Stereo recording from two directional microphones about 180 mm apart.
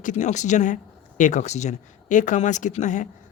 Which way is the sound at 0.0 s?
45° left (ahead or behind).